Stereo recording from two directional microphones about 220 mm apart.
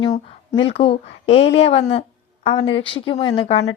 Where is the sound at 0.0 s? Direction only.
20° left (ahead or behind).